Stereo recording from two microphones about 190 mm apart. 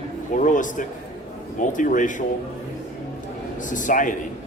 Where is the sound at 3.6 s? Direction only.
45° left (ahead or behind).